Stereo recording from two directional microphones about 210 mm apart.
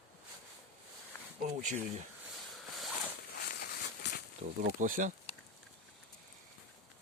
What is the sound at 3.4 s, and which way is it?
Walk, 45° left (ahead or behind).